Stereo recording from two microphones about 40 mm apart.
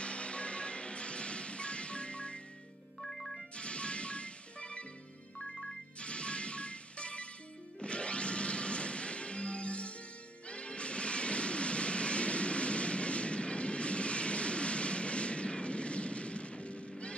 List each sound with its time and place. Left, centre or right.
0.0 s music: left
3.0 s music: centre
3.5 s music: left
5.9 s music: left